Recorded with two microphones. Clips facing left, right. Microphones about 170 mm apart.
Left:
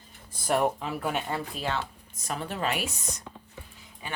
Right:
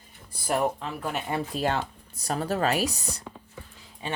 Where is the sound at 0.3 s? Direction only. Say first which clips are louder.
Left 1 dB; 5° right (ahead or behind).